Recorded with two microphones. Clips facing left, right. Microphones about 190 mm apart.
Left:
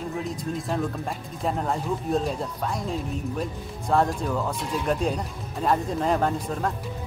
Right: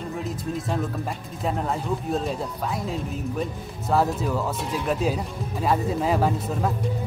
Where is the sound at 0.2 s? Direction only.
Centre (ahead or behind).